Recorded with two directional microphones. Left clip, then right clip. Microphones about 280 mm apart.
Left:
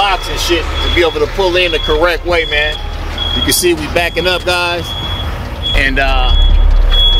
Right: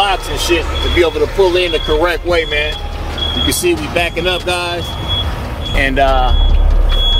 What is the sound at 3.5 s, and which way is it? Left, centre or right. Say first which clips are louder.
Speech: left 2 dB; centre.